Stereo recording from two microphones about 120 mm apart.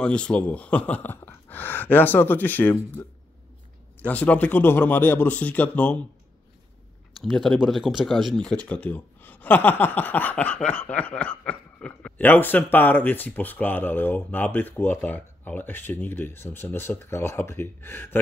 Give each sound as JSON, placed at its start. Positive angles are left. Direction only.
{"t": 0.0, "sound": "speech", "side_deg": 10}
{"t": 7.2, "sound": "speech", "side_deg": 0}